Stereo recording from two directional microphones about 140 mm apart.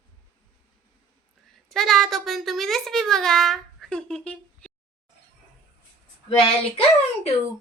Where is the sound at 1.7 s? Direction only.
Centre (ahead or behind).